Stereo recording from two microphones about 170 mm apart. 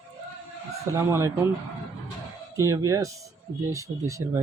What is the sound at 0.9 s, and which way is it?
Speech, 15° right (ahead or behind).